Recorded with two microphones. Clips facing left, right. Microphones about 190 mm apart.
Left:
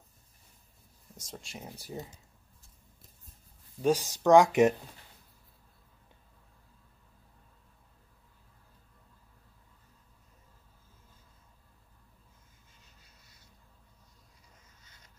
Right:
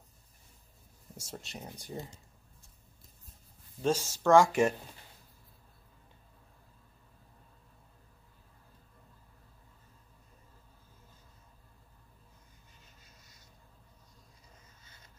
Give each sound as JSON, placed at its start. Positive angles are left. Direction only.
{"t": 1.1, "sound": "speech", "side_deg": 0}
{"t": 3.8, "sound": "speech", "side_deg": 15}